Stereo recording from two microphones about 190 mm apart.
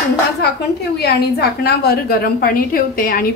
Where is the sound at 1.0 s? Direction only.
55° left (ahead or behind).